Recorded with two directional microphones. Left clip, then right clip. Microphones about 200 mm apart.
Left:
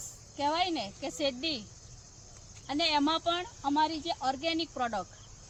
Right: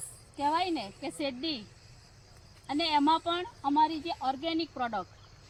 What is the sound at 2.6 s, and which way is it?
A woman's voice, 15° left (ahead or behind).